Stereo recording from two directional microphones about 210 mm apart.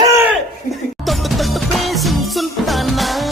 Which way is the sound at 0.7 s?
Centre (ahead or behind).